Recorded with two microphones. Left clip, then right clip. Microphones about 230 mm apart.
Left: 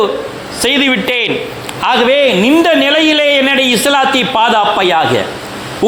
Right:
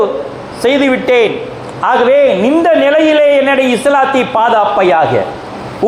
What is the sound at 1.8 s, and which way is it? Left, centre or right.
A man's voice, left.